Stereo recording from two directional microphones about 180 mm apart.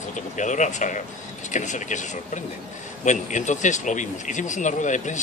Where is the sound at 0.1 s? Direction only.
45° left (ahead or behind).